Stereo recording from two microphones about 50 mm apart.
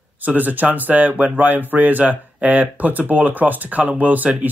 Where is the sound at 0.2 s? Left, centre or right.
Right.